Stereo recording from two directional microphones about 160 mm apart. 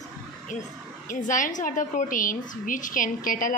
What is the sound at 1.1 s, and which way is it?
A woman's voice, 55° left (ahead or behind).